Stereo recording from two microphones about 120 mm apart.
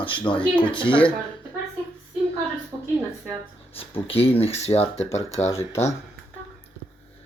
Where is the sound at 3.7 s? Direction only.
50° left (ahead or behind).